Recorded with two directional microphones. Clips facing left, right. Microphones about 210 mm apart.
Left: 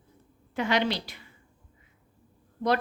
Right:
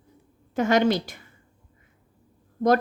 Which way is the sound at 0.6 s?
45° right (ahead or behind).